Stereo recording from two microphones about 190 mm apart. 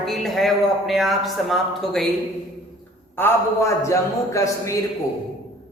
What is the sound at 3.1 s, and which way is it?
A man's voice, 15° left (ahead or behind).